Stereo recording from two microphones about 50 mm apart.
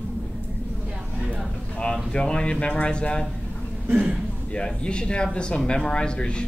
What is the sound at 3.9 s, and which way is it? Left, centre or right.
Speech, right.